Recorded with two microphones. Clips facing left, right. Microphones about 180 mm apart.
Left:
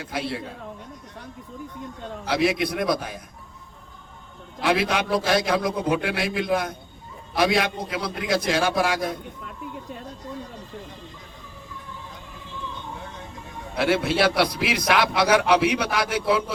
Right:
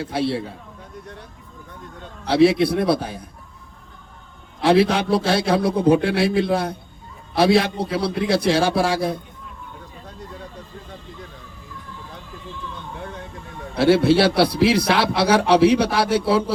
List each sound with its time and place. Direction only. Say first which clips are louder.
0.0 s a man's voice: right 7 dB; 30° right (ahead or behind)
2.2 s a man's voice: right 7 dB; 30° right (ahead or behind)
4.6 s a man's voice: right 6 dB; 30° right (ahead or behind)
13.7 s a man's voice: right 6 dB; 30° right (ahead or behind)